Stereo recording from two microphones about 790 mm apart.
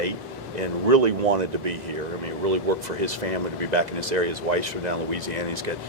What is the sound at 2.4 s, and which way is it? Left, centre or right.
Speech, right.